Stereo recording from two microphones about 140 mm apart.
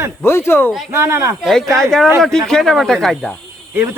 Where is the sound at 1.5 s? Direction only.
5° left (ahead or behind).